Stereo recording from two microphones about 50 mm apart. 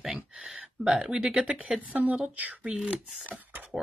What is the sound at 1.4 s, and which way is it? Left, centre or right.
Speech, right.